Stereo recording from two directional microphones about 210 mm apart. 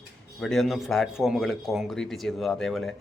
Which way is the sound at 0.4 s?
Centre (ahead or behind).